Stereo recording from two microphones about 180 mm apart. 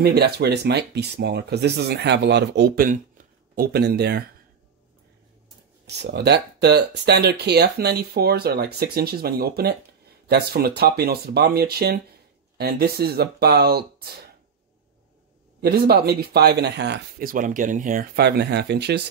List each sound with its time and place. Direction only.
0.0 s speech: 65° right (ahead or behind)
5.9 s speech: 65° right (ahead or behind)
15.6 s speech: 60° right (ahead or behind)
17.3 s speech: 45° right (ahead or behind); by 19.0 s 65° right (ahead or behind)